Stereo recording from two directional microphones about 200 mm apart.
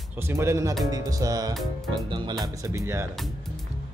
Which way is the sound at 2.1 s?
25° right (ahead or behind).